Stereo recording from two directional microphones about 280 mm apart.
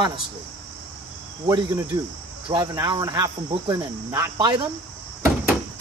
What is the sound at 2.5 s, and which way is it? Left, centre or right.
Speech, centre.